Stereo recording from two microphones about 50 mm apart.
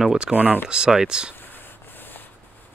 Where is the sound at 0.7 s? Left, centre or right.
Centre.